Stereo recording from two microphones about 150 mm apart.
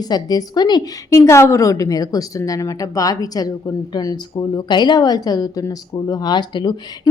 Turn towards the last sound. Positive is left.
turn(degrees=30)  # may be behind; listen again after turning